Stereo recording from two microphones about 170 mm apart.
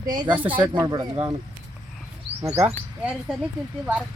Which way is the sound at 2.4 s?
15° right (ahead or behind).